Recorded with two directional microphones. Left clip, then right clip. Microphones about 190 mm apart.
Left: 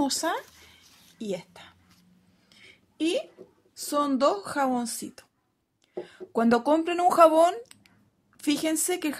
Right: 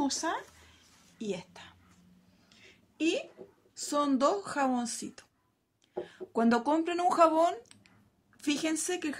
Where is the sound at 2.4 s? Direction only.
30° left (ahead or behind).